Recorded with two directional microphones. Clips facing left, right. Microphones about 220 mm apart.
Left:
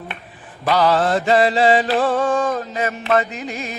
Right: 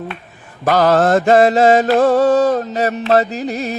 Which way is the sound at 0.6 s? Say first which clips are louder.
Right 4 dB; 45° right (ahead or behind).